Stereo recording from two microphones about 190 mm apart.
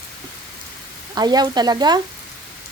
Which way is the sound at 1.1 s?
20° right (ahead or behind).